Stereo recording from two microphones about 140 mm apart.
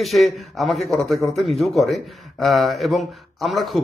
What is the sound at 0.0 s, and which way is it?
A man's voice, centre (ahead or behind).